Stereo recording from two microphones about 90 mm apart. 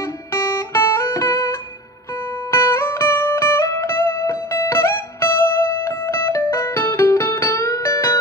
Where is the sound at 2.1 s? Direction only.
35° left (ahead or behind).